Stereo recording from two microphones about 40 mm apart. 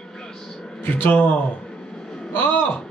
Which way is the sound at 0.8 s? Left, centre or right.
Left.